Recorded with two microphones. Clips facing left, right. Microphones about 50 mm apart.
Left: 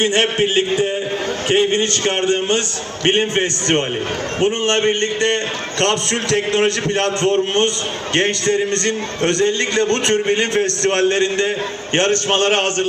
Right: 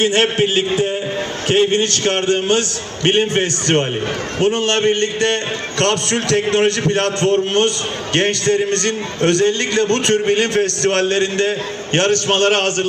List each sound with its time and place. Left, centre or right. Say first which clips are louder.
0.0 s a man's voice: right 1 dB; left